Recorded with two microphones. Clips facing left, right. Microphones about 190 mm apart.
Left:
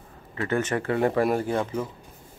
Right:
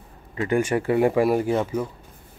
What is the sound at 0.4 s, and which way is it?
Speech, 15° right (ahead or behind).